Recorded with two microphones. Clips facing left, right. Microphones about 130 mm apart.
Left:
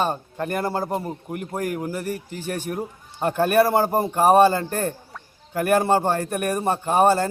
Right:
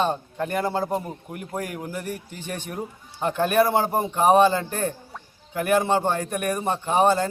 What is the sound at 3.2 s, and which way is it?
Speech, 50° left (ahead or behind).